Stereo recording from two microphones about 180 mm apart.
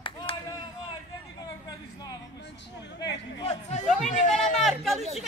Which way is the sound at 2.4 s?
75° left (ahead or behind).